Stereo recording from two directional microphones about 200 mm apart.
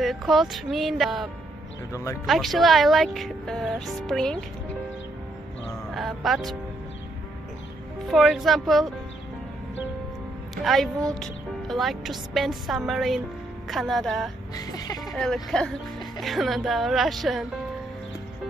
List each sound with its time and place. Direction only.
0.0 s speech: centre (ahead or behind)
1.9 s speech: 15° left (ahead or behind)
2.2 s speech: centre (ahead or behind)
5.9 s speech: centre (ahead or behind)
8.1 s speech: centre (ahead or behind)
10.5 s a woman's voice: centre (ahead or behind)
14.5 s speech: 20° left (ahead or behind)
15.1 s speech: centre (ahead or behind)